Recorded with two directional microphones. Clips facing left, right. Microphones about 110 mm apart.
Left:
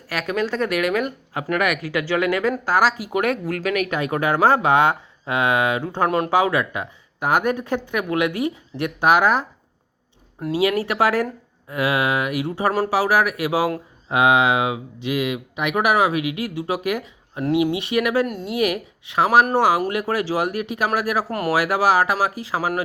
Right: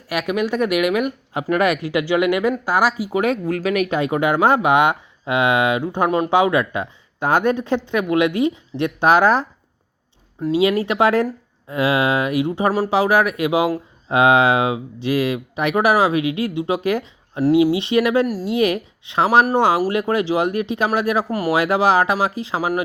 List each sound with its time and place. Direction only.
0.1 s speech: 15° right (ahead or behind)
3.7 s speech: 30° right (ahead or behind)
4.1 s speech: 20° right (ahead or behind)
10.5 s speech: 25° right (ahead or behind)
17.5 s speech: 25° left (ahead or behind)
17.7 s speech: 25° right (ahead or behind)